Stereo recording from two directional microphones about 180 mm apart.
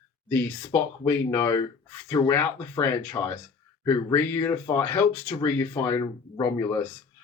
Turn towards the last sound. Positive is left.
turn(degrees=20)  # may be behind; listen again after turning